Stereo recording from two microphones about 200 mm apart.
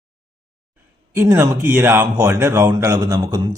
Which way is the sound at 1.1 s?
15° right (ahead or behind).